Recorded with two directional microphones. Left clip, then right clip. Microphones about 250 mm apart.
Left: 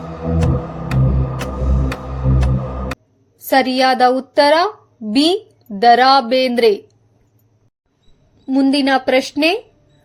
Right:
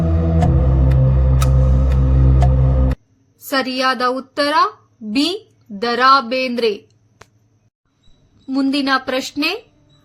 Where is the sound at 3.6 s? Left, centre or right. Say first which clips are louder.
Left 3 dB; centre.